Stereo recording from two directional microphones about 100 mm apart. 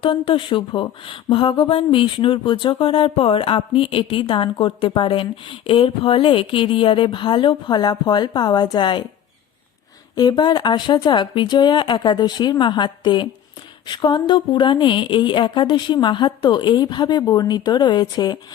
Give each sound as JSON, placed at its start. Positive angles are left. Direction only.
{"t": 0.0, "sound": "speech", "side_deg": 55}
{"t": 10.2, "sound": "a woman's voice", "side_deg": 45}